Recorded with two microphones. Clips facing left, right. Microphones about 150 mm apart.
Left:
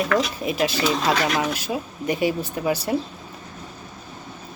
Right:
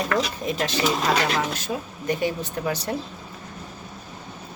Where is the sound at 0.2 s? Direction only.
10° left (ahead or behind).